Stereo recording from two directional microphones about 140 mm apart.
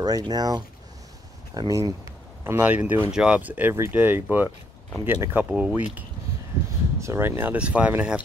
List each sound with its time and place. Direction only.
0.0 s speech: 30° right (ahead or behind); by 5.9 s 10° right (ahead or behind)
7.0 s speech: 20° right (ahead or behind)